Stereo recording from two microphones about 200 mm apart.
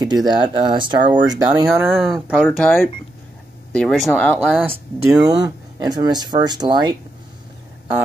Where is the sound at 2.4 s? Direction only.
Centre (ahead or behind).